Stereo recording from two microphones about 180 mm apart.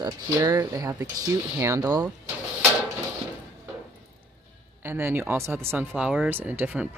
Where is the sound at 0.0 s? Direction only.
20° right (ahead or behind).